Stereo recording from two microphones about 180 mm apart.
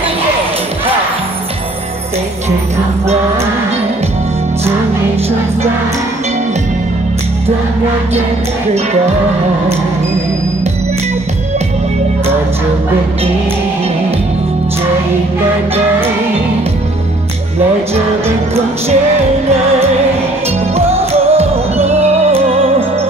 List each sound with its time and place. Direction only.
20.7 s music: 35° right (ahead or behind)